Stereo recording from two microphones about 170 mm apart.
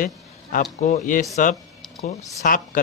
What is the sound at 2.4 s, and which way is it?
Speech, 50° left (ahead or behind).